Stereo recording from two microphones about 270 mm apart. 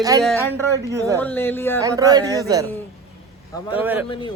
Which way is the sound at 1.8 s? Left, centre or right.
Centre.